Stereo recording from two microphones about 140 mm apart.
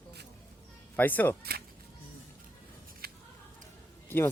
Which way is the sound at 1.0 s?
15° left (ahead or behind).